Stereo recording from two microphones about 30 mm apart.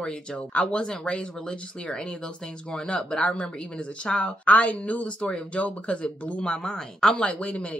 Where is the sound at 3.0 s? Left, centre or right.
Left.